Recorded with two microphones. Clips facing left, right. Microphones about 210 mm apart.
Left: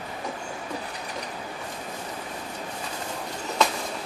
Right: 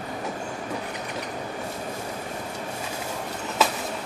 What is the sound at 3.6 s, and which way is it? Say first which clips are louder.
Train: even; 5° right (ahead or behind).